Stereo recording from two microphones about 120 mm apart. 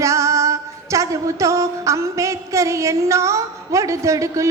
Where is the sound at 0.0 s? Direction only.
25° right (ahead or behind).